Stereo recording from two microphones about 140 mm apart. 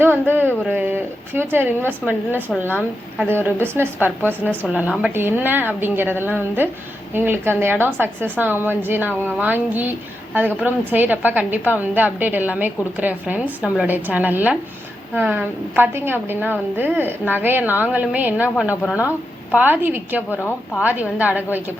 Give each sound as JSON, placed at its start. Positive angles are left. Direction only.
{"t": 0.0, "sound": "a woman's voice", "side_deg": -15}
{"t": 3.4, "sound": "a woman's voice", "side_deg": -15}
{"t": 20.3, "sound": "a woman's voice", "side_deg": 15}
{"t": 20.8, "sound": "a woman's voice", "side_deg": -10}